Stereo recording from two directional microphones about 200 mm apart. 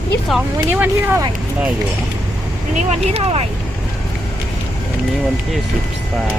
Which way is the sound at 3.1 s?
30° right (ahead or behind).